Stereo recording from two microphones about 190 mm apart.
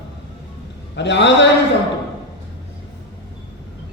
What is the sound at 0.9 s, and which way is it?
Speech, 65° left (ahead or behind).